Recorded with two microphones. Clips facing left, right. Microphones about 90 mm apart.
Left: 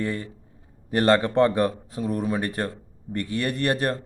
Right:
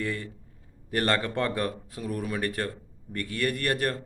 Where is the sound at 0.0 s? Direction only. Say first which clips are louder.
Left 4 dB; 30° left (ahead or behind).